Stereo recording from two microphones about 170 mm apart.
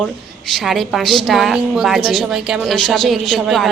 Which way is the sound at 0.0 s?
Centre (ahead or behind).